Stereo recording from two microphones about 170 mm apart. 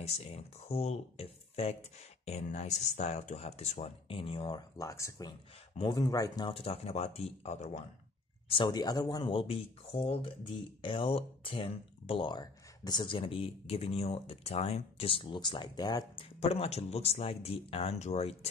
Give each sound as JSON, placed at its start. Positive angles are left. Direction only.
{"t": 0.0, "sound": "speech", "side_deg": 40}
{"t": 6.5, "sound": "speech", "side_deg": 35}
{"t": 8.5, "sound": "speech", "side_deg": 30}
{"t": 16.3, "sound": "speech", "side_deg": 35}